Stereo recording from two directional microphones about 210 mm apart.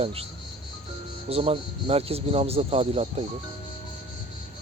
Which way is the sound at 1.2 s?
25° right (ahead or behind).